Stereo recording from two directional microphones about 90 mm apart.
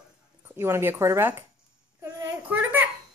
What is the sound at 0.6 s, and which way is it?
Speech, 25° right (ahead or behind).